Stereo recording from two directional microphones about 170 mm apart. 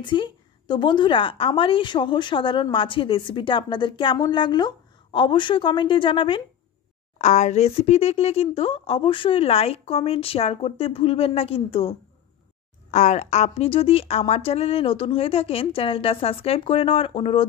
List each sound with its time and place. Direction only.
0.0 s speech: 30° left (ahead or behind)
7.2 s speech: 45° left (ahead or behind)